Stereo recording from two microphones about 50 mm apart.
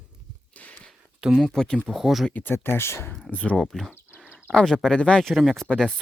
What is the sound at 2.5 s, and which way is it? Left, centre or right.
Speech, left.